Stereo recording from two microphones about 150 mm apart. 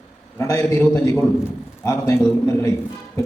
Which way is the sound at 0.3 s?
20° left (ahead or behind).